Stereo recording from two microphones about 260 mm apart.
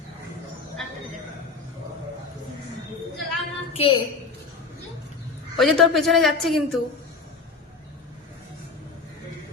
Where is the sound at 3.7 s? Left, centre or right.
Left.